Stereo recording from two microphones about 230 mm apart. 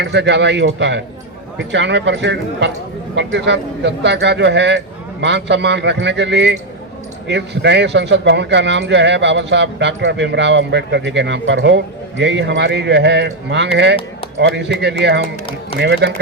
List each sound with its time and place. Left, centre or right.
0.0 s speech: right